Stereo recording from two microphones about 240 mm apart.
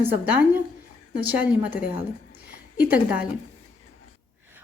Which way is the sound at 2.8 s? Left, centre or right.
Centre.